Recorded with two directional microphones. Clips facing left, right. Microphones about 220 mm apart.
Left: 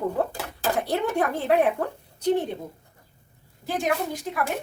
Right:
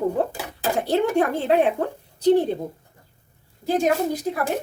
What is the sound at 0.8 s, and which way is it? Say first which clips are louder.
Speech: right 6 dB; 30° right (ahead or behind).